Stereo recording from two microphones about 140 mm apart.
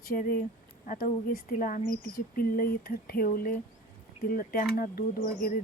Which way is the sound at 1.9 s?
90° left.